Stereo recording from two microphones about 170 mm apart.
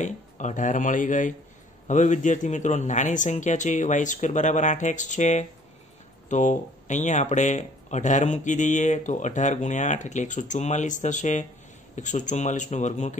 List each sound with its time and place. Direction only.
0.0 s speech: 45° left (ahead or behind)